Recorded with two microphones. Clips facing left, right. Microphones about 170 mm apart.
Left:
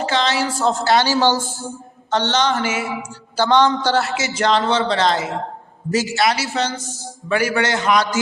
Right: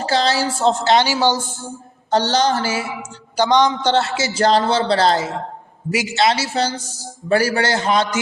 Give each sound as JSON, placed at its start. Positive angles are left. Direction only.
{"t": 0.0, "sound": "a sound", "side_deg": -35}
{"t": 0.7, "sound": "a woman's voice", "side_deg": -20}
{"t": 2.0, "sound": "a man's voice", "side_deg": -35}
{"t": 3.3, "sound": "a man's voice", "side_deg": -15}
{"t": 5.9, "sound": "a man's voice", "side_deg": -15}
{"t": 6.1, "sound": "a woman's voice", "side_deg": -25}